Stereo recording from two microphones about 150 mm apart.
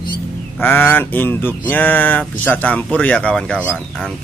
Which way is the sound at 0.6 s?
15° left (ahead or behind).